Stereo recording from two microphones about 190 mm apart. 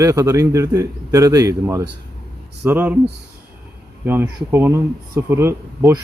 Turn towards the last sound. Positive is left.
turn(degrees=-15)  # may be behind; listen again after turning